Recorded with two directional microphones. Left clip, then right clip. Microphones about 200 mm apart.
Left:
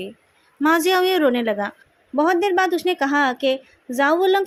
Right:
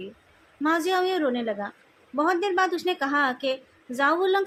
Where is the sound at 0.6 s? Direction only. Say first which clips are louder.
Left 6 dB; 45° left (ahead or behind).